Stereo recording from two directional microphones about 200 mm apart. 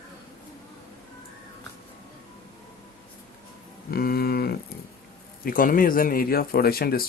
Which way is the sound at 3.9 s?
50° left (ahead or behind).